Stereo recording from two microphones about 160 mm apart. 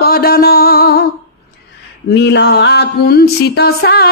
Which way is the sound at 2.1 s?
90° left.